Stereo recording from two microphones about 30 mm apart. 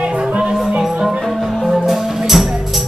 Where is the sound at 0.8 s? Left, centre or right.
Centre.